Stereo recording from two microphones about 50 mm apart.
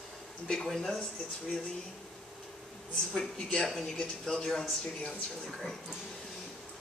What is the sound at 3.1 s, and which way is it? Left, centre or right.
A woman's voice, centre.